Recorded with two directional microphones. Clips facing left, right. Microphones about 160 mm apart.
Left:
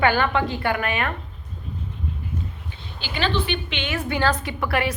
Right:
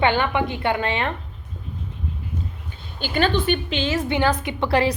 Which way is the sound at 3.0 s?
45° right (ahead or behind).